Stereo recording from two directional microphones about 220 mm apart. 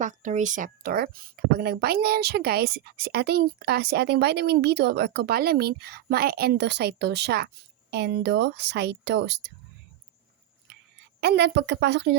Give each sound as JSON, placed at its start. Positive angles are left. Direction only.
{"t": 0.0, "sound": "speech", "side_deg": -35}
{"t": 11.2, "sound": "speech", "side_deg": -50}